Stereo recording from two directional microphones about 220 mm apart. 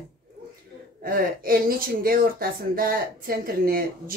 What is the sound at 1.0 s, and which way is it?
Speech, 40° right (ahead or behind).